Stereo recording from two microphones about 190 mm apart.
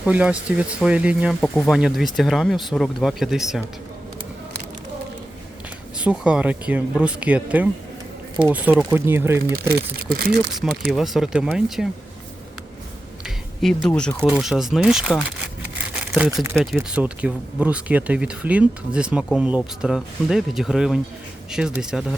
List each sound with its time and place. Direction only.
0.0 s speech: 5° right (ahead or behind)
6.0 s speech: 5° right (ahead or behind)
9.9 s speech: 55° right (ahead or behind)
10.8 s speech: centre (ahead or behind)
13.2 s a sound: centre (ahead or behind)
13.8 s speech: 5° left (ahead or behind)
15.9 s crumpling: 5° right (ahead or behind)
16.6 s speech: 5° right (ahead or behind)